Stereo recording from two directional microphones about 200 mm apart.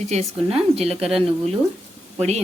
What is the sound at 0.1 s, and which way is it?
Speech, 30° right (ahead or behind).